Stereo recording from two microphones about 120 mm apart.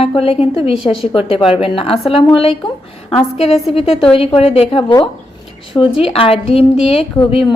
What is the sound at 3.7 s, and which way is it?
A woman's voice, 50° left (ahead or behind).